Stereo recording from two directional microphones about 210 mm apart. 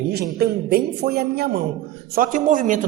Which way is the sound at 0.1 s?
50° right (ahead or behind).